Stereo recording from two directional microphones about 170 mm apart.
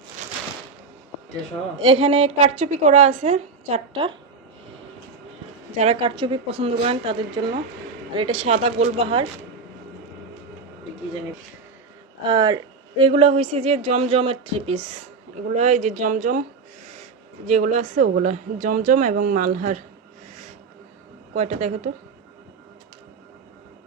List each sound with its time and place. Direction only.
1.8 s speech: 35° right (ahead or behind)
5.7 s speech: 35° right (ahead or behind)
12.3 s speech: 25° right (ahead or behind); by 19.8 s 50° right (ahead or behind)
21.3 s speech: 40° right (ahead or behind)